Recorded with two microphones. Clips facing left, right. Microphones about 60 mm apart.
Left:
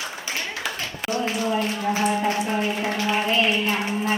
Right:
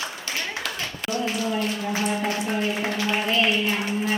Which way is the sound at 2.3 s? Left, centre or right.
Left.